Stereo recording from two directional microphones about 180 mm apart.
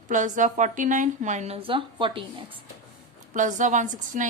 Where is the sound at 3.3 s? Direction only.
45° right (ahead or behind).